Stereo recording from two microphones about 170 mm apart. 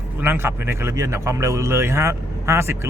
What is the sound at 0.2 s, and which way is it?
A man's voice, 15° right (ahead or behind).